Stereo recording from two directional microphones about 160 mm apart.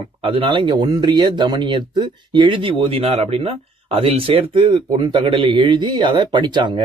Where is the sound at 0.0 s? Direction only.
35° right (ahead or behind).